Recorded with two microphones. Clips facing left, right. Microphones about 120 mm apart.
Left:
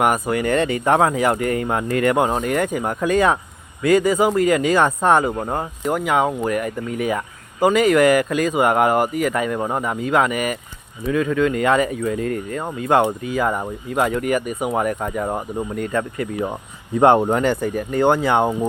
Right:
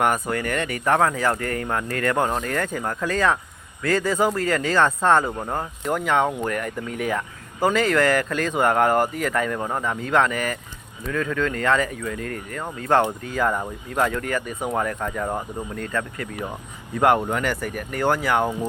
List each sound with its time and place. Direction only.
0.0 s speech: 10° left (ahead or behind)
0.4 s speech: 25° left (ahead or behind)